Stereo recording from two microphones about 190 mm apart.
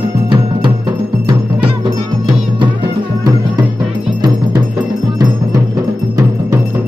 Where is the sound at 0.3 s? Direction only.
25° right (ahead or behind).